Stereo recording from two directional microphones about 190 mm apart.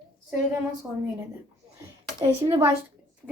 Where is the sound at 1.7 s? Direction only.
15° right (ahead or behind).